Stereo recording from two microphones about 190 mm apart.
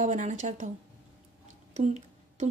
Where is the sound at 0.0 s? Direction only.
40° right (ahead or behind).